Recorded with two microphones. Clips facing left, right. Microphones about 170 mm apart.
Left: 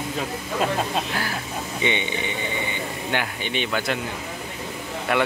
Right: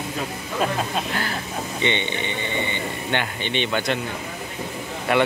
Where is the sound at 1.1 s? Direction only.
10° left (ahead or behind).